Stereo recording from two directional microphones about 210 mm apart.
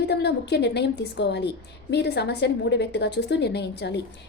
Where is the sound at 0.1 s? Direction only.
50° left (ahead or behind).